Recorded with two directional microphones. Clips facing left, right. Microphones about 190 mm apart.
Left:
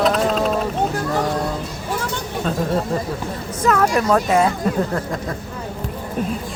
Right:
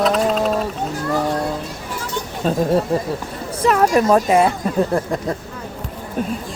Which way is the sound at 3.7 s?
20° right (ahead or behind).